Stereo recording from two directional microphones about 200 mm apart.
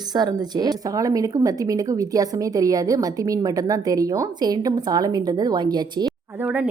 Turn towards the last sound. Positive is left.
turn(degrees=-5)  # may be behind; listen again after turning